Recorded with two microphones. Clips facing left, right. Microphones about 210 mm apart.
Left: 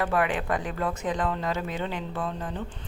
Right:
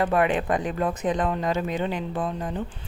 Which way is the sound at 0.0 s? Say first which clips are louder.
Right 4 dB; 20° right (ahead or behind).